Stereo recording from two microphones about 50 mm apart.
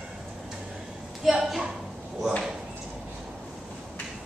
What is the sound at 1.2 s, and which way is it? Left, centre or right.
Speech, centre.